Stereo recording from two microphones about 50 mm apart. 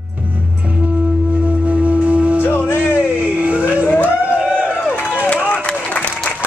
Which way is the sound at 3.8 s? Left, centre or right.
Left.